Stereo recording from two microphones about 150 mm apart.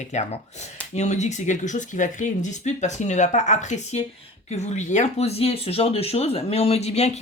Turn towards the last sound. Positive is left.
turn(degrees=45)  # may be behind; listen again after turning